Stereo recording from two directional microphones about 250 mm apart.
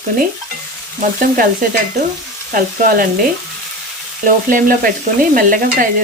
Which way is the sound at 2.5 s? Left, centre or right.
Right.